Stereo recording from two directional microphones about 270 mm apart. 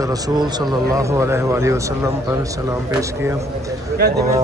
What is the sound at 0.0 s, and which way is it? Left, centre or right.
Speech, centre.